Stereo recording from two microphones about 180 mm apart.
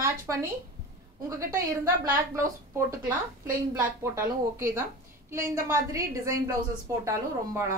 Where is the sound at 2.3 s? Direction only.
15° right (ahead or behind).